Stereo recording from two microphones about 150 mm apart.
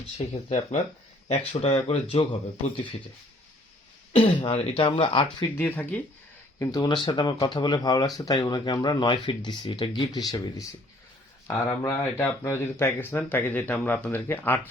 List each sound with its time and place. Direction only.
0.2 s speech: 50° left (ahead or behind)
4.1 s speech: 35° left (ahead or behind)
5.5 s speech: 10° left (ahead or behind)
6.6 s speech: 25° left (ahead or behind)